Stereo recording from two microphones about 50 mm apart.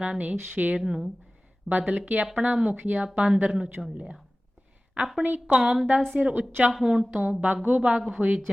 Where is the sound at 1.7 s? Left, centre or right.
Right.